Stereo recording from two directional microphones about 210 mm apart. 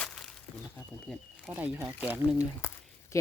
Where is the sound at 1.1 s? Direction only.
5° right (ahead or behind).